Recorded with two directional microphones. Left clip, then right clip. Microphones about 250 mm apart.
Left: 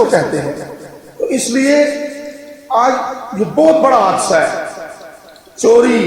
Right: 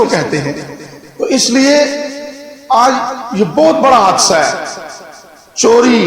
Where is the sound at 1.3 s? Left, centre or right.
Right.